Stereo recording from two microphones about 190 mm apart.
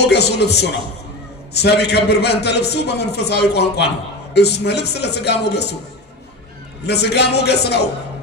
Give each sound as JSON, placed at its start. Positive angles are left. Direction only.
{"t": 0.0, "sound": "a man's voice", "side_deg": 60}
{"t": 6.9, "sound": "a man's voice", "side_deg": 60}